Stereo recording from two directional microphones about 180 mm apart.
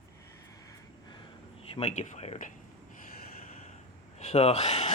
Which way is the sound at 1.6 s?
35° left (ahead or behind).